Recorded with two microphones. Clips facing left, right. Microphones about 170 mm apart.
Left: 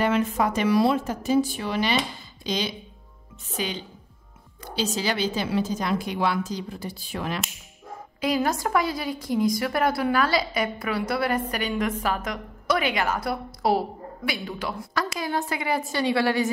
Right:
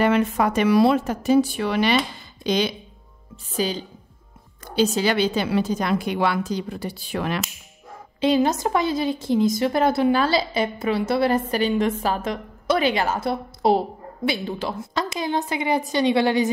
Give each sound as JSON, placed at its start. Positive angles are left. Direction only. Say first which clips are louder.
{"t": 0.0, "sound": "speech", "louder": "right 3 dB", "side_deg": -65}
{"t": 3.5, "sound": "a woman's voice", "louder": "right 6 dB", "side_deg": -35}
{"t": 4.6, "sound": "a woman's voice", "louder": "right 6 dB", "side_deg": -55}
{"t": 8.2, "sound": "speech", "louder": "right 5 dB", "side_deg": -25}